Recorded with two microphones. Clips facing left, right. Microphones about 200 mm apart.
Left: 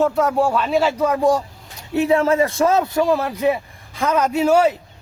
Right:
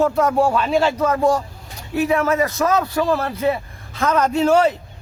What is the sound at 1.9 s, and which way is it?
A man's voice, 25° left (ahead or behind).